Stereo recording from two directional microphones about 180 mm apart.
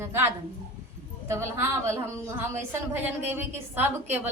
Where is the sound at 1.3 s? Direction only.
15° right (ahead or behind).